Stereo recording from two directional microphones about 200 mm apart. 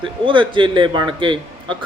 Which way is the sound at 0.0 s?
25° right (ahead or behind).